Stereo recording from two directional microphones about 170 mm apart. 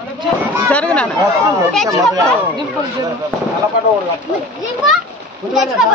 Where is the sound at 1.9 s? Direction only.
20° right (ahead or behind).